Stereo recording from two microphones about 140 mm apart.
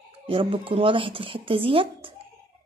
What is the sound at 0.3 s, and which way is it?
Speech, 40° right (ahead or behind).